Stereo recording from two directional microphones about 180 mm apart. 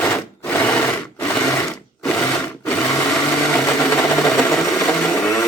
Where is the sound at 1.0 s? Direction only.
15° left (ahead or behind).